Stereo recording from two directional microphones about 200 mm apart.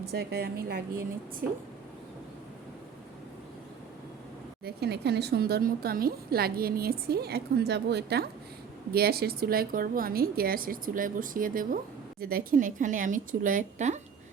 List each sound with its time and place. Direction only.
0.1 s speech: 55° right (ahead or behind)
4.6 s speech: 55° right (ahead or behind); by 14.0 s 35° right (ahead or behind)